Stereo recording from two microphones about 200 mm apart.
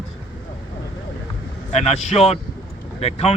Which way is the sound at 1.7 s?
30° left (ahead or behind).